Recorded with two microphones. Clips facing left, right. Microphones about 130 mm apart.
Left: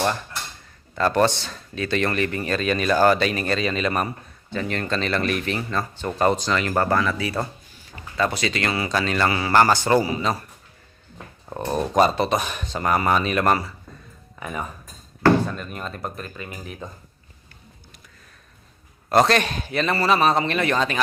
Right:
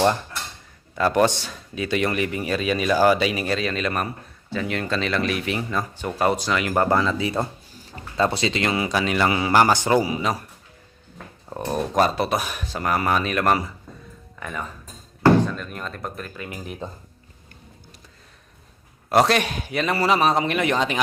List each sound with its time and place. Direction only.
0.9 s speech: 10° right (ahead or behind)
6.8 s speech: 20° right (ahead or behind)
11.4 s speech: centre (ahead or behind)
14.3 s speech: 10° left (ahead or behind)
19.1 s speech: 10° right (ahead or behind)